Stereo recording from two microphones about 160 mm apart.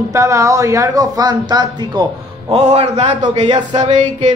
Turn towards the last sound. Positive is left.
turn(degrees=-50)  # may be behind; listen again after turning